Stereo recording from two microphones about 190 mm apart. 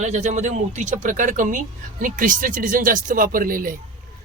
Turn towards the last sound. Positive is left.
turn(degrees=-45)  # may be behind; listen again after turning